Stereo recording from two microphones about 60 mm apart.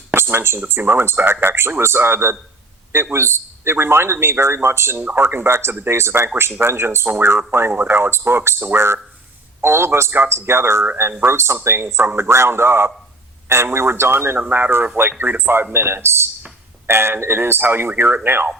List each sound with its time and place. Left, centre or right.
0.1 s a sound: right
0.7 s a man's voice: right
4.9 s speech: right
5.2 s a man's voice: right